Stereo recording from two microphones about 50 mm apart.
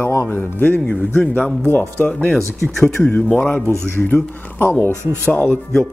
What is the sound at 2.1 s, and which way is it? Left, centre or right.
Speech, left.